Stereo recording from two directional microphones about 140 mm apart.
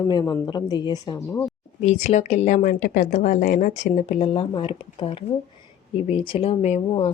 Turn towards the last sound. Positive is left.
turn(degrees=40)  # may be behind; listen again after turning